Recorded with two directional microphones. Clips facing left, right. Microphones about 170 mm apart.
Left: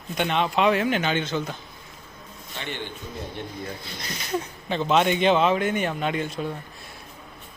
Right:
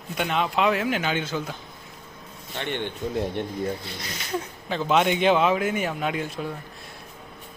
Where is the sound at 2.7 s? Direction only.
60° right (ahead or behind).